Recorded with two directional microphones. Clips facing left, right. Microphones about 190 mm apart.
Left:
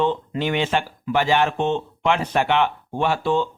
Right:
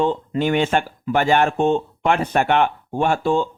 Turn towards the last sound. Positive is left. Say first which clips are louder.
# right 2 dB
turn(degrees=-45)  # may be behind; listen again after turning